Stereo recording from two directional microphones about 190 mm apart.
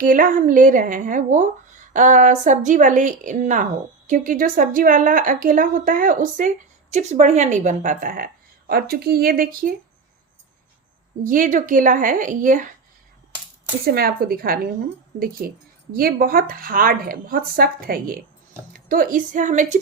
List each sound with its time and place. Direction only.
0.0 s a woman's voice: 45° right (ahead or behind)
11.2 s a woman's voice: 45° right (ahead or behind)
13.8 s a woman's voice: 50° right (ahead or behind)